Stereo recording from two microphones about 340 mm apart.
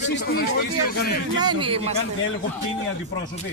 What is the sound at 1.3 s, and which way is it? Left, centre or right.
Speech, centre.